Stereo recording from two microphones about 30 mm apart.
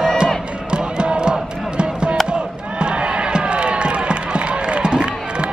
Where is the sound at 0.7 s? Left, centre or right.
Right.